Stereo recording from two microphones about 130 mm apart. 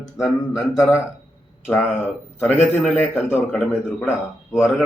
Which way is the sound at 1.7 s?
10° left (ahead or behind).